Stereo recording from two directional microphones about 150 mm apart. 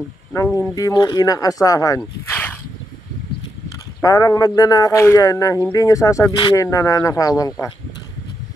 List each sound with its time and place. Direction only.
0.6 s speech: 20° left (ahead or behind)
2.0 s a sound: 10° left (ahead or behind)
4.0 s speech: 25° left (ahead or behind)